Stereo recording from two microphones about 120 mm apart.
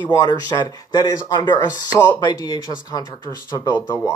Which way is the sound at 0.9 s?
35° left (ahead or behind).